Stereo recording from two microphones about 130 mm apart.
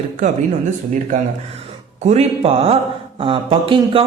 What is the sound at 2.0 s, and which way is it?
Speech, 55° right (ahead or behind).